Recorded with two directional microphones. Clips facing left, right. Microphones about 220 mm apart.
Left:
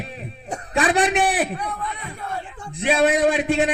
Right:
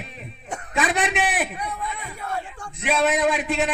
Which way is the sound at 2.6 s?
30° left (ahead or behind).